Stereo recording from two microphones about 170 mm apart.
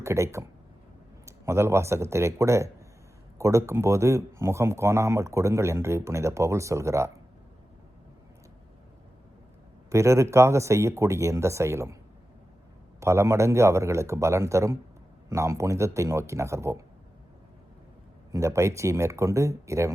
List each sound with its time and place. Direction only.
0.0 s speech: 15° right (ahead or behind)
9.9 s speech: 15° right (ahead or behind)
13.0 s speech: 15° right (ahead or behind)
18.3 s speech: 15° right (ahead or behind)